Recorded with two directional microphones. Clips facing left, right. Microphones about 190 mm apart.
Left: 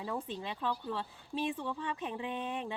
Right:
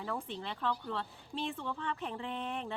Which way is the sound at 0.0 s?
15° left (ahead or behind).